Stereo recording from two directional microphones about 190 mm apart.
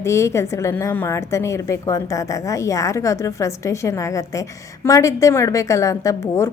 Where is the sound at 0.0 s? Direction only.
15° left (ahead or behind).